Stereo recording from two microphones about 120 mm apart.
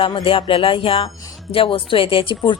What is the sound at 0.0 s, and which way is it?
Speech, 50° left (ahead or behind).